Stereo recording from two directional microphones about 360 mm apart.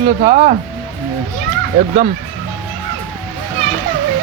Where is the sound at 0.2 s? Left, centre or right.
Centre.